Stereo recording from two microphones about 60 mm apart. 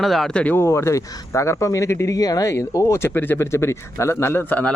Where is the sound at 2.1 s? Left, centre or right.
Left.